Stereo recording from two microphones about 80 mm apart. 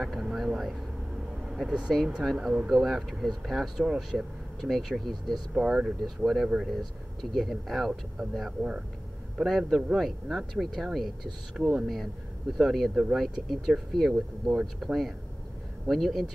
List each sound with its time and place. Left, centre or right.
0.0 s vehicle: centre
1.4 s speech: centre
2.7 s speech: centre
13.5 s speech: centre